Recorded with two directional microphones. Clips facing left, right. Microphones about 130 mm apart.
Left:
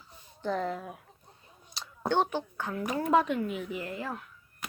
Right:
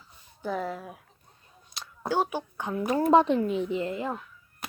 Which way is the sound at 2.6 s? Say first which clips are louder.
Right 3 dB; 20° right (ahead or behind).